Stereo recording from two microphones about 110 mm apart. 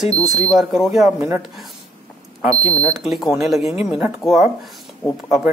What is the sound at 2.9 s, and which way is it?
Speech, centre (ahead or behind).